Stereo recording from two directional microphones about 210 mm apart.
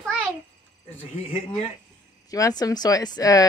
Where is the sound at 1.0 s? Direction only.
25° left (ahead or behind).